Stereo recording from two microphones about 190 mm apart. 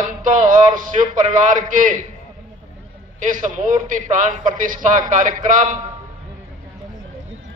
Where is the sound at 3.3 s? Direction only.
45° right (ahead or behind).